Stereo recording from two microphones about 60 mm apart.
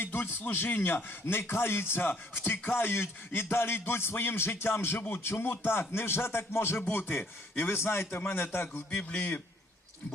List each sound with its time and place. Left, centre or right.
0.0 s speech: left
8.9 s a man's voice: left